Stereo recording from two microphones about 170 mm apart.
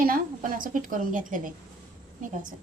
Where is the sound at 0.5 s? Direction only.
55° right (ahead or behind).